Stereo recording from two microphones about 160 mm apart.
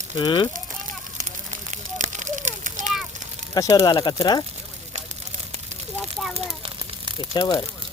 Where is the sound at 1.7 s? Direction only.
50° right (ahead or behind).